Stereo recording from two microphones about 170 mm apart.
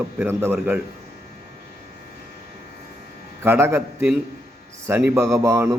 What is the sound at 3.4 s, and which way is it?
A man's voice, 15° right (ahead or behind).